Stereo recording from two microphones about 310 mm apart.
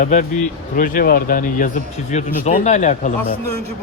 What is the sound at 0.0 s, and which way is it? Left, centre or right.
Speech, left.